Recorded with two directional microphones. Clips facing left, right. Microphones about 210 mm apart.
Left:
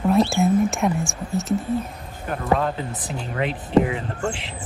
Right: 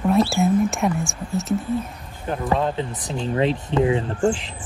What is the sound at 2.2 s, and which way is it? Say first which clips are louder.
Speech: even; 25° right (ahead or behind).